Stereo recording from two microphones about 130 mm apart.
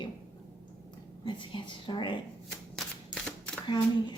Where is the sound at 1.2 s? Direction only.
35° left (ahead or behind).